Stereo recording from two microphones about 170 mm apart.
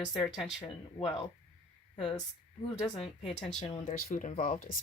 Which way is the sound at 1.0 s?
30° left (ahead or behind).